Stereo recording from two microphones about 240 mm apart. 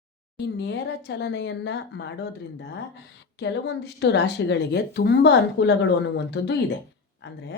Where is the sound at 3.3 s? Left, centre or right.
Left.